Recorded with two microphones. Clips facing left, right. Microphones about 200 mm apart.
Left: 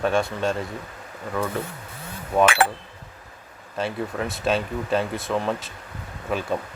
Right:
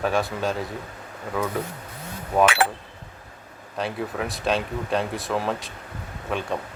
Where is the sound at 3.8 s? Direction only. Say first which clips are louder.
Left 1 dB; centre (ahead or behind).